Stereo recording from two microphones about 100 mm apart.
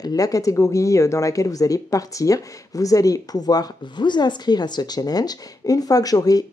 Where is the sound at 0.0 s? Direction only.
35° left (ahead or behind).